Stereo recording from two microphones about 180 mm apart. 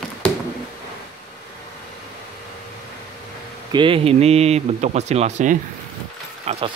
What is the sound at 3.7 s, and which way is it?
Speech, 30° right (ahead or behind).